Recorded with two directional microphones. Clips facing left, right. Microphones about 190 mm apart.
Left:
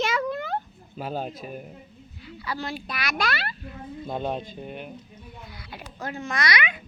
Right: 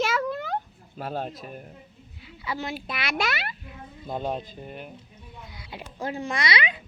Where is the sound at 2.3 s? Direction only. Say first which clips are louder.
Even; 20° right (ahead or behind).